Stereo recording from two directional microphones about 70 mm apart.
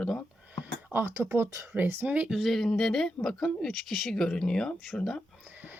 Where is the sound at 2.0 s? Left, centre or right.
Centre.